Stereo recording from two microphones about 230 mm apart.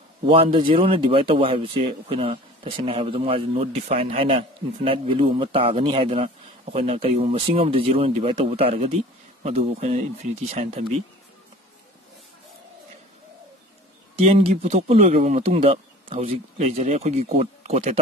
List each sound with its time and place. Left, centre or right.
0.3 s speech: right
14.1 s speech: right